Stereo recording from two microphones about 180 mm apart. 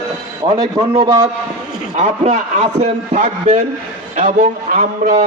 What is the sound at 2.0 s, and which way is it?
A man's voice, 35° right (ahead or behind).